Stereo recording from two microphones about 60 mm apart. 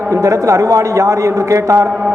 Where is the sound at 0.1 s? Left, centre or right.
Right.